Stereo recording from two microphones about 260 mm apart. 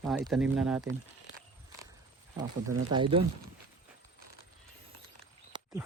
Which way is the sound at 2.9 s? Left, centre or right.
Centre.